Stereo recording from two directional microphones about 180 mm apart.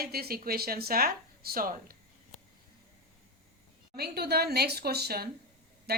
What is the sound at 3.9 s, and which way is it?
A woman's voice, 60° right (ahead or behind).